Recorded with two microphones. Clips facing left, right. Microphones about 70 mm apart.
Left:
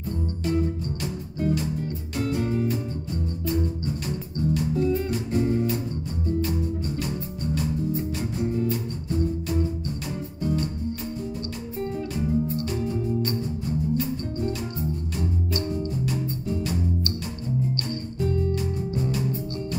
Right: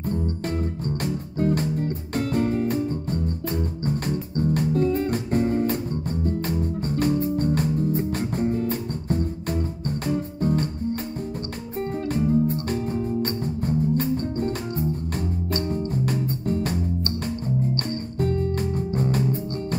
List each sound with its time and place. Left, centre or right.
0.1 s music: right
1.0 s music: right
11.8 s music: right
18.2 s music: right